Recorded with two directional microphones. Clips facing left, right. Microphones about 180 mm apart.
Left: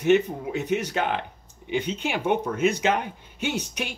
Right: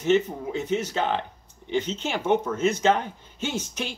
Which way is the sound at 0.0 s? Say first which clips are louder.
Left 2 dB; 15° left (ahead or behind).